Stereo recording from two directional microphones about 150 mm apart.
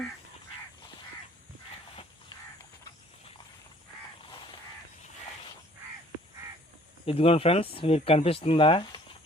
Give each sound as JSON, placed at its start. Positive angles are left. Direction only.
{"t": 2.3, "sound": "crow", "side_deg": 30}
{"t": 7.0, "sound": "speech", "side_deg": 40}